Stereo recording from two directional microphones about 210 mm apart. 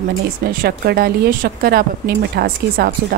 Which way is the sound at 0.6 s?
45° right (ahead or behind).